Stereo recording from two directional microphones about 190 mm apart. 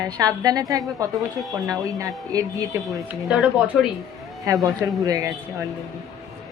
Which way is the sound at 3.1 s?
5° right (ahead or behind).